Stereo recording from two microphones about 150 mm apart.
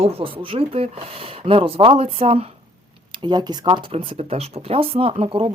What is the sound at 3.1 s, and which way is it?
Speech, 30° right (ahead or behind).